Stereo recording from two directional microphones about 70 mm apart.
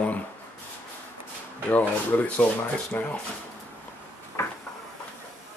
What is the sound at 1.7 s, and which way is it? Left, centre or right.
Speech, left.